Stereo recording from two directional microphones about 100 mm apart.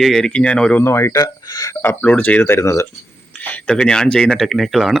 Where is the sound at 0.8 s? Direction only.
25° left (ahead or behind).